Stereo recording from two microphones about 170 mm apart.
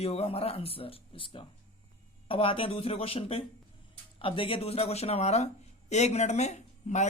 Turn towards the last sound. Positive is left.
turn(degrees=40)  # may be behind; listen again after turning